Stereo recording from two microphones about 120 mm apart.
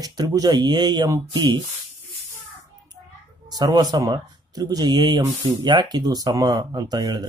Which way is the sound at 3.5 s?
35° right (ahead or behind).